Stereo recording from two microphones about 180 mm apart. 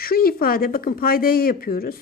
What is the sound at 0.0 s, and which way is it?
A woman's voice, 55° left (ahead or behind).